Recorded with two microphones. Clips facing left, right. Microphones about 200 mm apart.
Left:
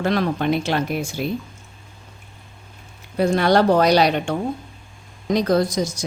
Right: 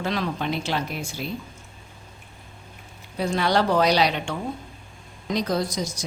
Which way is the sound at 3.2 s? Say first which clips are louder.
Left 6 dB; 50° left (ahead or behind).